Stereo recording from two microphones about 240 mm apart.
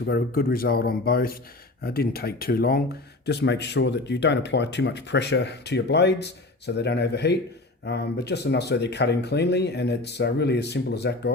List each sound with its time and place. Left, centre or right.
0.0 s speech: left